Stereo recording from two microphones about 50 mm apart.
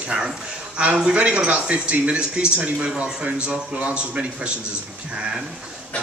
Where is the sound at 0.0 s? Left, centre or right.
Right.